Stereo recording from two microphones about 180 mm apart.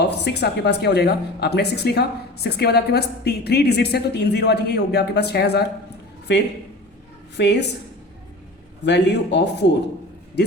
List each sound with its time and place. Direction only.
0.0 s speech: 70° left (ahead or behind)
8.8 s speech: 70° left (ahead or behind)